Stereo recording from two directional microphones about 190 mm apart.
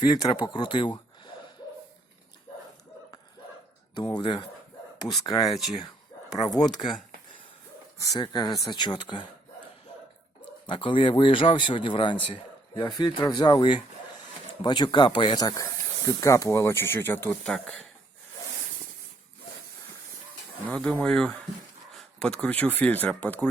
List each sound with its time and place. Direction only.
0.0 s speech: 25° left (ahead or behind)
3.9 s speech: 25° left (ahead or behind)
8.0 s speech: 20° left (ahead or behind)
10.7 s speech: 25° left (ahead or behind); by 17.8 s 5° left (ahead or behind)
20.7 s speech: 5° left (ahead or behind)